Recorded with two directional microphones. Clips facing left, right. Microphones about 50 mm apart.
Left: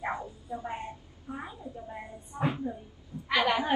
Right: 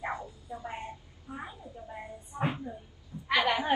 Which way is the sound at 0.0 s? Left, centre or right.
Left.